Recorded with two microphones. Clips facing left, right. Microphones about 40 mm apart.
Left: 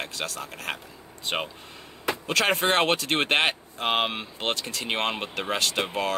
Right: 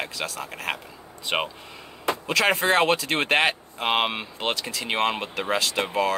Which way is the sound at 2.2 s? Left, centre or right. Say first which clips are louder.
Right 1 dB; centre.